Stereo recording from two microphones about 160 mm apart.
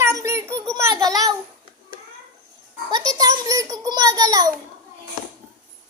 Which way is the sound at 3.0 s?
20° right (ahead or behind).